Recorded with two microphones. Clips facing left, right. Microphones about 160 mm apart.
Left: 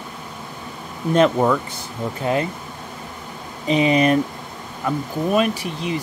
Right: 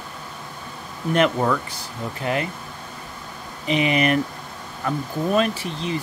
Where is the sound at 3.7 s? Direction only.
25° left (ahead or behind).